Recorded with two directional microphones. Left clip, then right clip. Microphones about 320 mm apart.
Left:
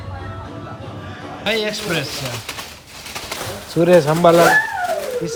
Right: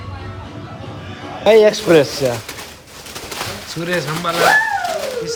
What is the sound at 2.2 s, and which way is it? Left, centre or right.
Speech, centre.